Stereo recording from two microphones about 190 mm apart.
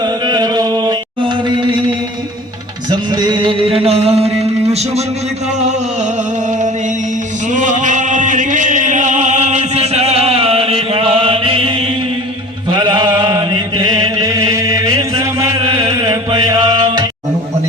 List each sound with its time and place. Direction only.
0.0 s chant: 20° right (ahead or behind)
3.2 s music: 25° right (ahead or behind)
7.5 s music: 40° right (ahead or behind)
12.7 s chant: 25° right (ahead or behind)